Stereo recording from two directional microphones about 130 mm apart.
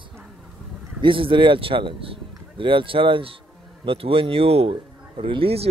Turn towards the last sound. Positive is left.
turn(degrees=-45)  # may be behind; listen again after turning